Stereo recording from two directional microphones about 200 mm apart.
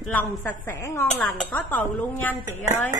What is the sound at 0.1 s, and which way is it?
Speech, 10° left (ahead or behind).